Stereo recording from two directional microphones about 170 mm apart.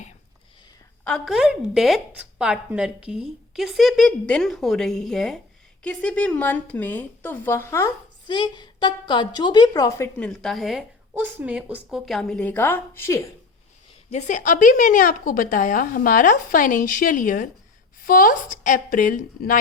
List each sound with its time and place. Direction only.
1.0 s a woman's voice: centre (ahead or behind)
10.2 s a woman's voice: centre (ahead or behind)
14.1 s a woman's voice: 45° left (ahead or behind)